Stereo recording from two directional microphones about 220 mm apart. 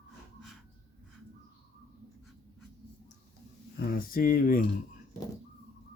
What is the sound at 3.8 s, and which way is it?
Speech, 40° left (ahead or behind).